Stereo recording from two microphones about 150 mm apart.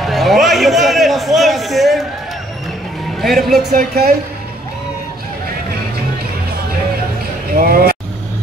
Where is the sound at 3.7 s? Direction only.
90° right.